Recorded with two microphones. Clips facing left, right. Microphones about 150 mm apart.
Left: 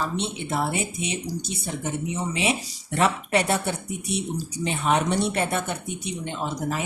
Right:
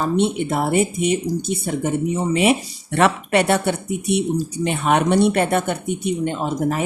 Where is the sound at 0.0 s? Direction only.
55° right (ahead or behind).